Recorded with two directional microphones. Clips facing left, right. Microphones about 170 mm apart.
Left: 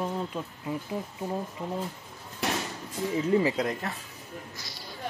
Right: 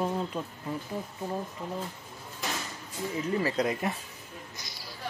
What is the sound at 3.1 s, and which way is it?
Speech, 15° left (ahead or behind).